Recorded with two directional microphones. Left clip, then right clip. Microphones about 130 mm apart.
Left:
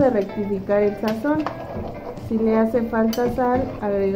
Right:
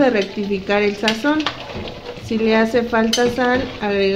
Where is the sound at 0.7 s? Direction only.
60° right (ahead or behind).